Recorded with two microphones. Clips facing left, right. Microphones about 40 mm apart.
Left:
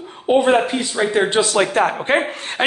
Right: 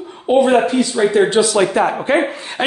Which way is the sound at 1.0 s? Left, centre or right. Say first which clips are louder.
Right 3 dB; left.